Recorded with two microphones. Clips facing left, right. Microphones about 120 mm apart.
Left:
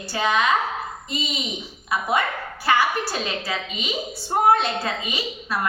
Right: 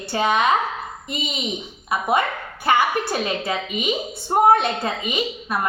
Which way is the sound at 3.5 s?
20° right (ahead or behind).